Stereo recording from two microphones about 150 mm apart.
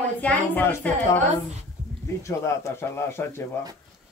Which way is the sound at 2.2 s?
20° left (ahead or behind).